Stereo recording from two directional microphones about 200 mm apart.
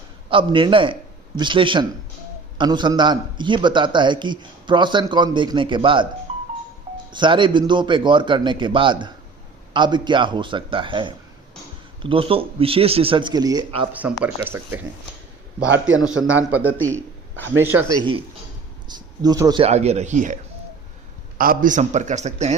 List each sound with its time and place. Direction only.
0.3 s a man's voice: 25° right (ahead or behind)
6.3 s music: 35° right (ahead or behind)
7.1 s a man's voice: 25° right (ahead or behind)
13.9 s speech: 5° right (ahead or behind)
16.2 s a man's voice: 90° right
17.6 s speech: 10° right (ahead or behind)
19.6 s a man's voice: 30° right (ahead or behind)